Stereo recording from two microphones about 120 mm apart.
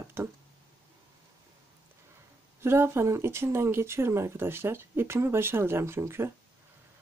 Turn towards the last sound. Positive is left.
turn(degrees=-20)  # may be behind; listen again after turning